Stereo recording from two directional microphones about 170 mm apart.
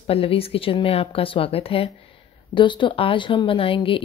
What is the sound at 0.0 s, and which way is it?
Speech, 35° left (ahead or behind).